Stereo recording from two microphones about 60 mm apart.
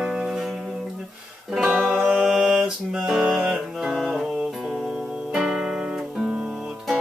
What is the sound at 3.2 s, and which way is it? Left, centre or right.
Music, centre.